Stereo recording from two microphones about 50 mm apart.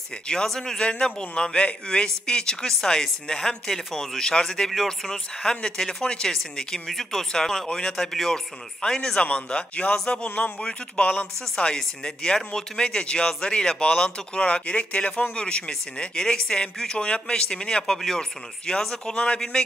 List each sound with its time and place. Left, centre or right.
0.3 s speech: centre
4.6 s speech: centre
6.9 s speech: centre
7.6 s speech: centre
9.2 s speech: left
19.1 s speech: left